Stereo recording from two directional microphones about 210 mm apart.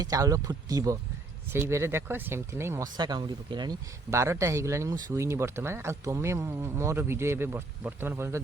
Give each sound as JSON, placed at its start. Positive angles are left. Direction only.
{"t": 0.0, "sound": "speech", "side_deg": -15}